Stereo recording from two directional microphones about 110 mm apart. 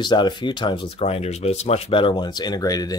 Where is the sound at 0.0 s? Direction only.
40° left (ahead or behind).